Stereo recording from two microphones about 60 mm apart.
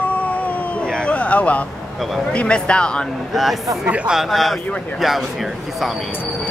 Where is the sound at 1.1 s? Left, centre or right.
Left.